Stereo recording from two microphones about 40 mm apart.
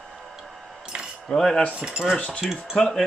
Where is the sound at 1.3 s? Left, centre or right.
Centre.